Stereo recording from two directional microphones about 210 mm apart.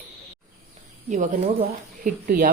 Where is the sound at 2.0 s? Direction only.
40° right (ahead or behind).